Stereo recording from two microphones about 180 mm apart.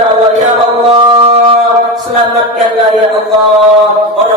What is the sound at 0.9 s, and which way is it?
Music, 30° right (ahead or behind).